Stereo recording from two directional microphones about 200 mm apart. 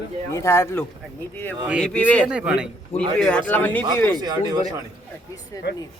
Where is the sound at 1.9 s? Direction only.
5° left (ahead or behind).